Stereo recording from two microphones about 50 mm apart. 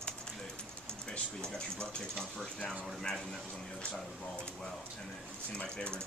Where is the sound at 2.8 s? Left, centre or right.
Centre.